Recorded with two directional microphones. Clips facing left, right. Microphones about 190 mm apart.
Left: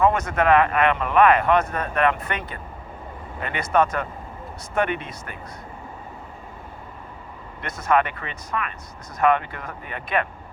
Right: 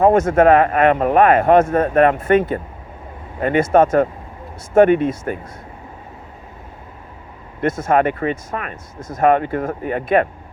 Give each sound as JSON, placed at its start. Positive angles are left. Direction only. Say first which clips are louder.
{"t": 0.0, "sound": "speech", "louder": "right 8 dB", "side_deg": -45}
{"t": 7.9, "sound": "speech", "louder": "right 4 dB", "side_deg": -45}
{"t": 9.0, "sound": "speech", "louder": "right 12 dB", "side_deg": -25}
{"t": 9.2, "sound": "speech", "louder": "right 6 dB", "side_deg": -45}